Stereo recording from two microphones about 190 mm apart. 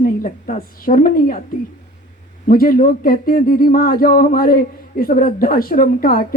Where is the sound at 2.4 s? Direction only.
50° left (ahead or behind).